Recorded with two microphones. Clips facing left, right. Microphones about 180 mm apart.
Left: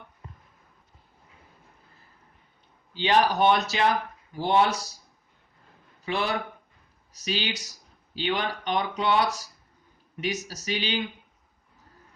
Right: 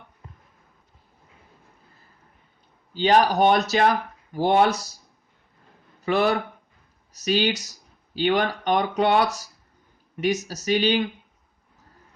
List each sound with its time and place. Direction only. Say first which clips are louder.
2.9 s speech: right 4 dB; 40° right (ahead or behind)
6.1 s speech: right 7 dB; 45° right (ahead or behind)